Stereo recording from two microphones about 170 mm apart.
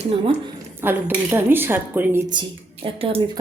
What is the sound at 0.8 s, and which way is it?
A woman's voice, 10° right (ahead or behind).